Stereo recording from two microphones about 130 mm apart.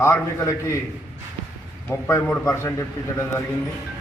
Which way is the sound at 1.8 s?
15° left (ahead or behind).